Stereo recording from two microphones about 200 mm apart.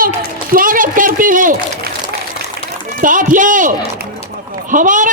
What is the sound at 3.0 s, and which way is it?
Speech, 40° right (ahead or behind).